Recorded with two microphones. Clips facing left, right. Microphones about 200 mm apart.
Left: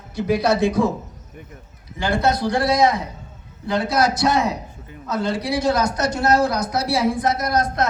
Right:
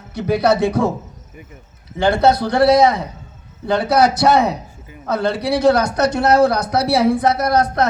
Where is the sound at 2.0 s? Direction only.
65° right (ahead or behind).